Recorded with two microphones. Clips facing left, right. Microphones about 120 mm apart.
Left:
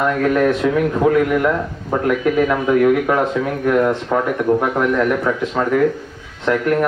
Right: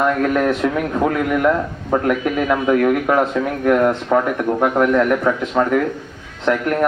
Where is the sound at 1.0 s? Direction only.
20° right (ahead or behind).